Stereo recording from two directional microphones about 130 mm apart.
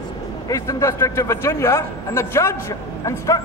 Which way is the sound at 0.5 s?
25° left (ahead or behind).